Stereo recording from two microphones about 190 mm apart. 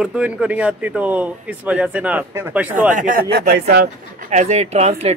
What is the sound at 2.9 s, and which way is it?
Speech, 45° right (ahead or behind).